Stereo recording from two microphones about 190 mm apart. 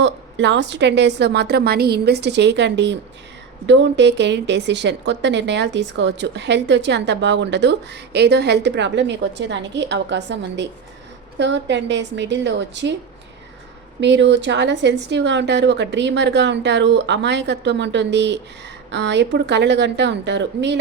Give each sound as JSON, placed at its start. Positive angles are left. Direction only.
{"t": 0.0, "sound": "a woman's voice", "side_deg": -70}
{"t": 14.0, "sound": "a woman's voice", "side_deg": -65}